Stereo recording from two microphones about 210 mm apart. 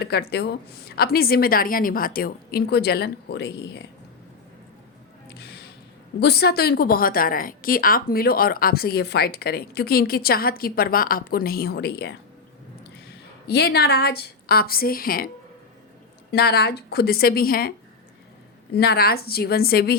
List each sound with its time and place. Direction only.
0.0 s a woman's voice: 50° left (ahead or behind)
5.4 s music: 50° left (ahead or behind)
6.1 s a woman's voice: 50° left (ahead or behind)
16.3 s a woman's voice: 50° left (ahead or behind)
18.7 s a woman's voice: 50° left (ahead or behind)